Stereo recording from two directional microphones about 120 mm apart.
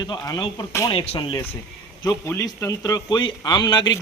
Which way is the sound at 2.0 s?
20° left (ahead or behind).